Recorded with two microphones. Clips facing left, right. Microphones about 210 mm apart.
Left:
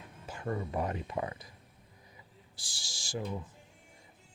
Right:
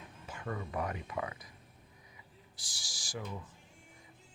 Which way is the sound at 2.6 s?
30° left (ahead or behind).